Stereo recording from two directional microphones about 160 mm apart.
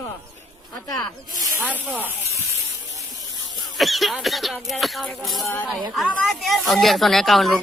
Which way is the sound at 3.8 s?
Centre (ahead or behind).